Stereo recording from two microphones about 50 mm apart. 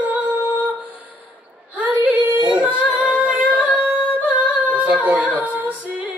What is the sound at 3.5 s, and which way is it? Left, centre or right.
Singing, right.